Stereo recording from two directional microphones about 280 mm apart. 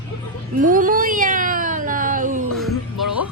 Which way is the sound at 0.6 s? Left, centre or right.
Right.